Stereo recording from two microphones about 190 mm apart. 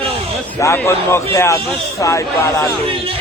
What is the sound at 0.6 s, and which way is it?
A man's voice, 15° left (ahead or behind).